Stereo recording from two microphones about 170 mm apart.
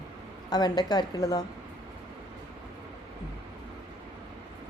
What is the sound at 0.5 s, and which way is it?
Speech, 25° left (ahead or behind).